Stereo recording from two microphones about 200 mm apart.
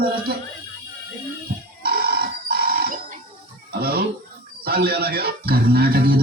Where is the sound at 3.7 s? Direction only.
50° right (ahead or behind).